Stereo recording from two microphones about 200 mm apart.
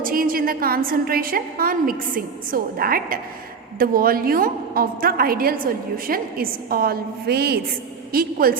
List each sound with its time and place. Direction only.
0.0 s a woman's voice: 45° right (ahead or behind)